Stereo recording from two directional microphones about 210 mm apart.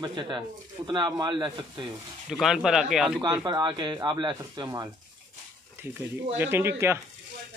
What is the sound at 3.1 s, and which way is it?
Speech, 20° right (ahead or behind).